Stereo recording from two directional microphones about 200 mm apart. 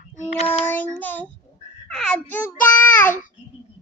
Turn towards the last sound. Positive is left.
turn(degrees=10)  # may be behind; listen again after turning